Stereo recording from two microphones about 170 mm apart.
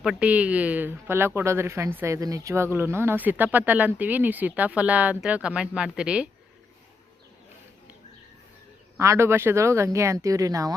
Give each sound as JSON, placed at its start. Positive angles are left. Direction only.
{"t": 0.0, "sound": "speech", "side_deg": -5}
{"t": 9.0, "sound": "speech", "side_deg": -15}